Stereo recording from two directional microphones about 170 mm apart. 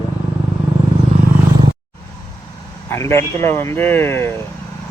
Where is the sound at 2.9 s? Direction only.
15° left (ahead or behind).